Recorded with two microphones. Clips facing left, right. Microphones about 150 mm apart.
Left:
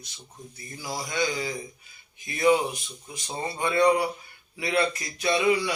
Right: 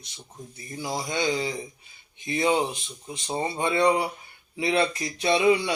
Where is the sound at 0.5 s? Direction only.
25° right (ahead or behind).